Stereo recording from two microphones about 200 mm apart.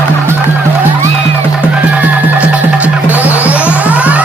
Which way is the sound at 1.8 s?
10° right (ahead or behind).